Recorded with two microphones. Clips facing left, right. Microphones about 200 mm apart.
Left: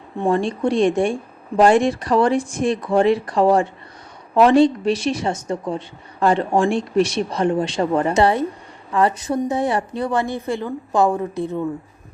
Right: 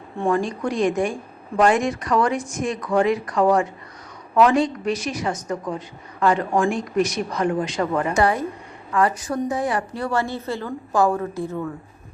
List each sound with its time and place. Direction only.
0.3 s a woman's voice: 30° left (ahead or behind)